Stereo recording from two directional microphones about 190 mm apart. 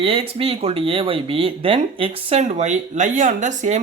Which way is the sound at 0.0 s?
30° right (ahead or behind).